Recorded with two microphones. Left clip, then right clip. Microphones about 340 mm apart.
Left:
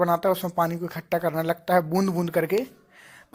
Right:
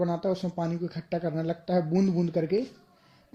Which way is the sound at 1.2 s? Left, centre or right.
Left.